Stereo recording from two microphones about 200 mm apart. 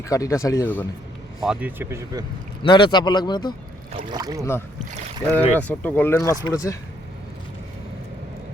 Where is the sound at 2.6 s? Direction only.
25° left (ahead or behind).